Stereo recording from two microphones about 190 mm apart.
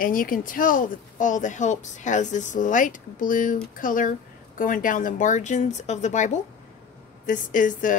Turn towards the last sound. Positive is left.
turn(degrees=45)  # may be behind; listen again after turning